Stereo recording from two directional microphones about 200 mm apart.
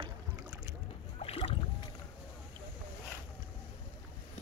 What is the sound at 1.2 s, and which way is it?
Boat, 30° left (ahead or behind).